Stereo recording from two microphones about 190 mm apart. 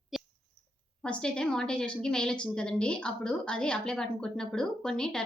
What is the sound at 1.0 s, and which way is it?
A woman's voice, 5° left (ahead or behind).